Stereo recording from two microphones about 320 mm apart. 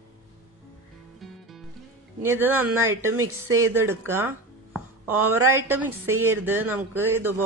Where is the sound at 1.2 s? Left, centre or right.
Centre.